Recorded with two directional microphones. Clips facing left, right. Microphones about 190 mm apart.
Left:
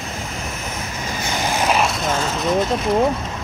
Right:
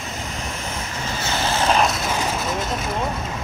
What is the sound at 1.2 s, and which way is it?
Vehicle, 15° left (ahead or behind).